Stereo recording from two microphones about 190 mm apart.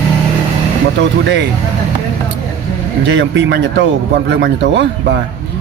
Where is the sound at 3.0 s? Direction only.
70° right (ahead or behind).